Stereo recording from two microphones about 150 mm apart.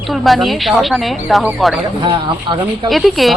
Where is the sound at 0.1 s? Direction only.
Centre (ahead or behind).